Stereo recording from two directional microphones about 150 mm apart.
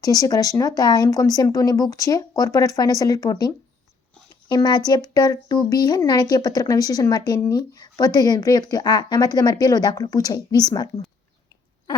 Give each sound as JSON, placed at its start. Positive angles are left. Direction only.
{"t": 0.0, "sound": "speech", "side_deg": 25}